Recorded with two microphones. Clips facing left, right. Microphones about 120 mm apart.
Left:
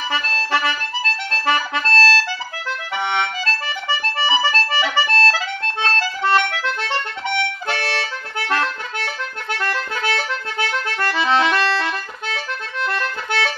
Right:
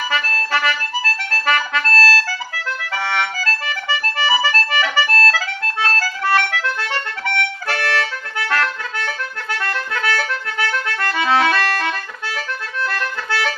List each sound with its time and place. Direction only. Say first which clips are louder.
0.1 s accordion: left 1 dB; 25° left (ahead or behind)
12.8 s accordion: left 1 dB; 25° left (ahead or behind)